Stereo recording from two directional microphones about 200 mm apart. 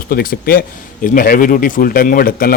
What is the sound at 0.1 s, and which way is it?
Speech, 45° left (ahead or behind).